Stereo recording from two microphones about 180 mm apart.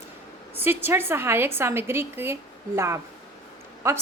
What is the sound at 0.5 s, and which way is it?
A woman's voice, 10° right (ahead or behind).